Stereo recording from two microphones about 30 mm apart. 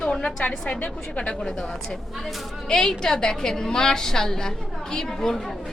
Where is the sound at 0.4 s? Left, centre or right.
Left.